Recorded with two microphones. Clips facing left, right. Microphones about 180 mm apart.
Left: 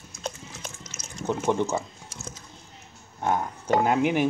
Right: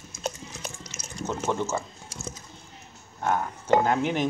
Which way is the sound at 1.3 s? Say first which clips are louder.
Left 3 dB; 15° left (ahead or behind).